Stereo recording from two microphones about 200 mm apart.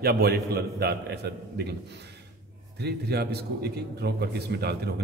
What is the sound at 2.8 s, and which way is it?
A man's voice, 55° right (ahead or behind).